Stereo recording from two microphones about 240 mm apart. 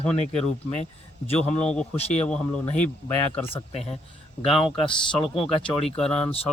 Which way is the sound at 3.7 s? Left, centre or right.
Left.